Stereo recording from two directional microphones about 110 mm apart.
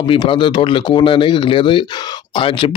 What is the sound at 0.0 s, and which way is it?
A man's voice, 55° left (ahead or behind).